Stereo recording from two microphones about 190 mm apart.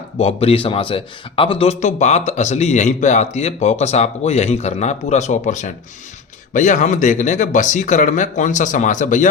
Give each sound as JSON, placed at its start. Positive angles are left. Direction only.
{"t": 0.2, "sound": "speech", "side_deg": 30}